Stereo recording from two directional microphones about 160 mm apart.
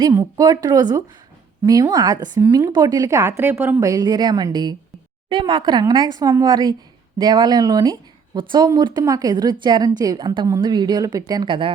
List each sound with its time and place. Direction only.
0.1 s a woman's voice: 20° right (ahead or behind)